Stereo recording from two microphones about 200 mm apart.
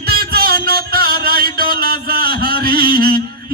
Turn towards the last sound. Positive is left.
turn(degrees=-50)  # may be behind; listen again after turning